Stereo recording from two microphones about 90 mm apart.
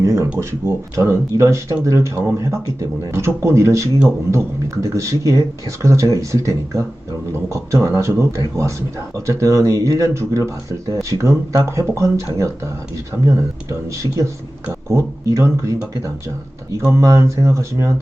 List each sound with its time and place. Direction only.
0.0 s a sound: 30° right (ahead or behind)
0.3 s speech: 30° right (ahead or behind)
16.9 s speech: 35° right (ahead or behind)